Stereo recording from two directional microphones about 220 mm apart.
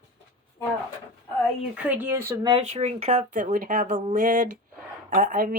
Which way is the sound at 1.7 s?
5° right (ahead or behind).